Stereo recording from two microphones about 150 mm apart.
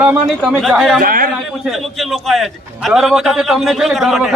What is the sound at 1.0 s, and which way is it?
Speech, 70° right (ahead or behind).